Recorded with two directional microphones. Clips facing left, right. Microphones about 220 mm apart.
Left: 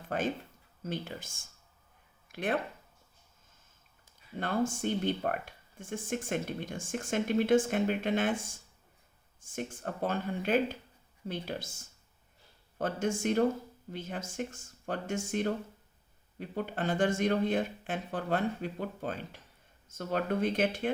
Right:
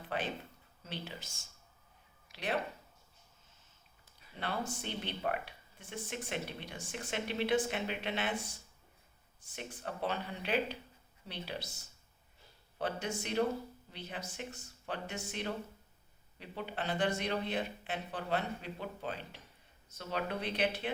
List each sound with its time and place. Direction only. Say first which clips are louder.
0.1 s speech: left 6 dB; 45° left (ahead or behind)
4.4 s speech: left 8 dB; 45° left (ahead or behind)